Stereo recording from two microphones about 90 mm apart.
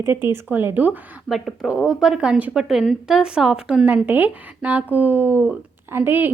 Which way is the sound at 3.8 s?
20° right (ahead or behind).